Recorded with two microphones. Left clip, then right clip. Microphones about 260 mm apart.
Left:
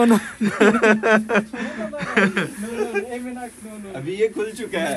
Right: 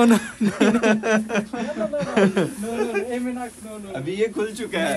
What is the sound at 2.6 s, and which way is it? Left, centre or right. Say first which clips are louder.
Snake: even; centre.